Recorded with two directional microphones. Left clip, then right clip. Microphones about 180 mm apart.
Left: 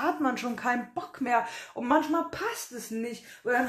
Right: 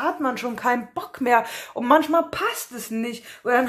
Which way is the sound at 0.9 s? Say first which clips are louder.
Right 8 dB; 35° right (ahead or behind).